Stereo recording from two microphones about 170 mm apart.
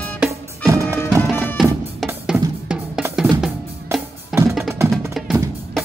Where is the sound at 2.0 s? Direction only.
15° right (ahead or behind).